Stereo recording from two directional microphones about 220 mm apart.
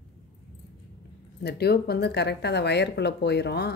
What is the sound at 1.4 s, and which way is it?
Speech, 45° left (ahead or behind).